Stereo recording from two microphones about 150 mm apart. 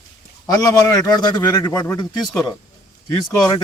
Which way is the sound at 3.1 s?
25° left (ahead or behind).